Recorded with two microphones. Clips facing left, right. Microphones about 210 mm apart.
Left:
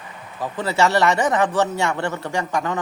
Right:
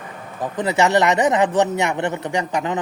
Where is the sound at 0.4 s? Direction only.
20° right (ahead or behind).